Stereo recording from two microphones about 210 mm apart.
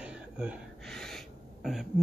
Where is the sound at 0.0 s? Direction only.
5° right (ahead or behind).